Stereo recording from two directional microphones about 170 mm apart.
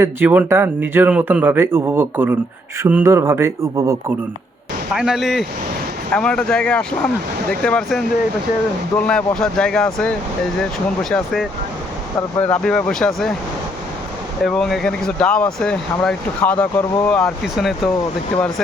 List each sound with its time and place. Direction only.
0.0 s speech: 10° right (ahead or behind)
4.9 s speech: centre (ahead or behind)
12.4 s speech: 5° left (ahead or behind)
14.4 s speech: centre (ahead or behind)